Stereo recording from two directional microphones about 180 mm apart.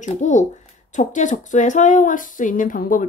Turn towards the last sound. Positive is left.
turn(degrees=50)  # may be behind; listen again after turning